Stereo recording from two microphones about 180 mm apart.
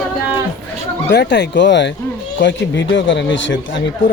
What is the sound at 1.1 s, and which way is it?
Speech, 75° left (ahead or behind).